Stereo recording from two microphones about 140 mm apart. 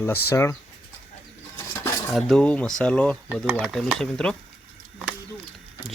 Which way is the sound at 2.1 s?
Centre (ahead or behind).